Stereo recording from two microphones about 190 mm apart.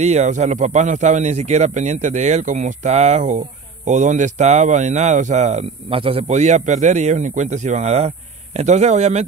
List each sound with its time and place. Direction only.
0.0 s speech: 35° right (ahead or behind)